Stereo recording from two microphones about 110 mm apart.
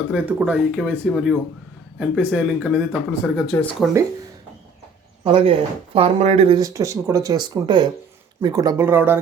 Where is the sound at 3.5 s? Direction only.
25° left (ahead or behind).